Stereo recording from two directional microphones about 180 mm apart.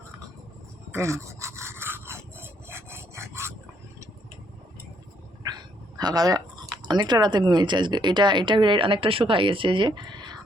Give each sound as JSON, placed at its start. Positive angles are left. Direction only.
{"t": 0.9, "sound": "rub", "side_deg": -15}
{"t": 5.5, "sound": "speech", "side_deg": -20}